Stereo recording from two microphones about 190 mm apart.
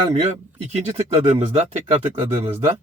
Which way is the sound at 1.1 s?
35° right (ahead or behind).